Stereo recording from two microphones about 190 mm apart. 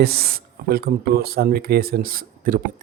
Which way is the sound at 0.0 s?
55° right (ahead or behind).